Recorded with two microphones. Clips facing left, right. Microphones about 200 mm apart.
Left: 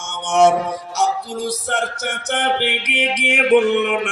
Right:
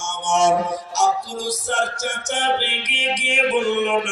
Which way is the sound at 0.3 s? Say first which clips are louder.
Left 4 dB; 60° left (ahead or behind).